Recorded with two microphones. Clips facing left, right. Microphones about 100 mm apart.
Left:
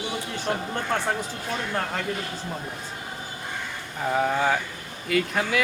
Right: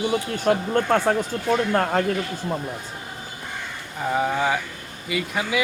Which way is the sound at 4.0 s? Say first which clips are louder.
Right 1 dB; 5° right (ahead or behind).